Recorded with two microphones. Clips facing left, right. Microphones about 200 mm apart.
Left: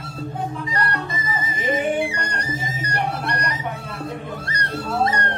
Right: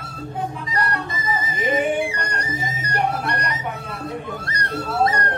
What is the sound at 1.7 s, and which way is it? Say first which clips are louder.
Music: even; centre (ahead or behind).